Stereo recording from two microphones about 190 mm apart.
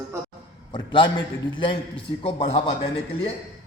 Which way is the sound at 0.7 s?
25° left (ahead or behind).